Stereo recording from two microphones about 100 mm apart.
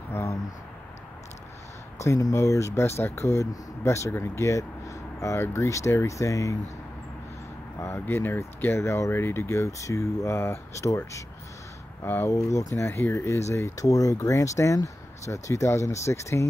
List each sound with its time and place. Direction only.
0.1 s a sound: 25° left (ahead or behind)
2.0 s speech: 30° left (ahead or behind)
8.0 s speech: 20° left (ahead or behind)